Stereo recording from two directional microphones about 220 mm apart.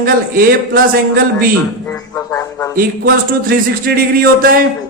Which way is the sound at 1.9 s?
15° left (ahead or behind).